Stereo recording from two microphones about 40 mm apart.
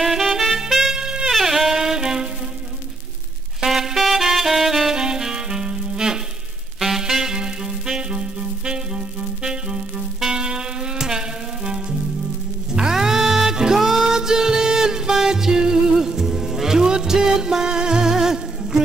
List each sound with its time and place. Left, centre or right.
0.0 s music: centre
0.9 s music: centre
1.3 s music: centre
3.6 s saxophone: centre
4.9 s music: centre
6.8 s music: centre
7.3 s clarinet: centre
10.2 s music: centre